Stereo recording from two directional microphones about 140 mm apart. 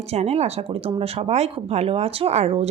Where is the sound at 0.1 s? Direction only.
50° right (ahead or behind).